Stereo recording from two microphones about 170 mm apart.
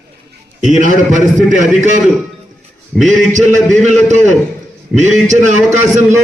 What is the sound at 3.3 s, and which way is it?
A man's voice, 45° right (ahead or behind).